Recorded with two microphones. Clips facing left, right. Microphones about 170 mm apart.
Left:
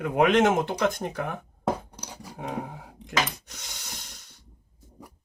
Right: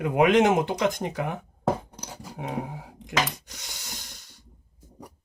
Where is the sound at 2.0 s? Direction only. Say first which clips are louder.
Right 1 dB; centre (ahead or behind).